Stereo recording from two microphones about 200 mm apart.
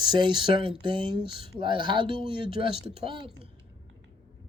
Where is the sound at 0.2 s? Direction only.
25° right (ahead or behind).